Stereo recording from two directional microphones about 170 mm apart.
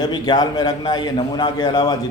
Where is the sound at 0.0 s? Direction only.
25° left (ahead or behind).